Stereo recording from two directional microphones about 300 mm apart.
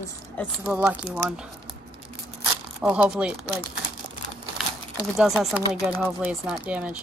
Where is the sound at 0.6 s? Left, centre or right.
Centre.